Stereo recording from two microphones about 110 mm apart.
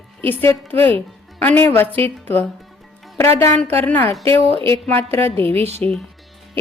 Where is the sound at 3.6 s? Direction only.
15° left (ahead or behind).